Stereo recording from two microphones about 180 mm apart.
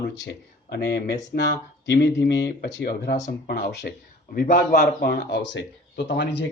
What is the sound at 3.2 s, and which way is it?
Speech, 55° left (ahead or behind).